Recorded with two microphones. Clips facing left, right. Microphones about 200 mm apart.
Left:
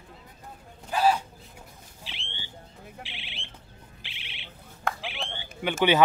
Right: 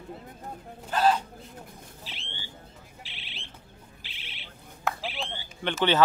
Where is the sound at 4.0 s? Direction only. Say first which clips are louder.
Left 1 dB; 40° right (ahead or behind).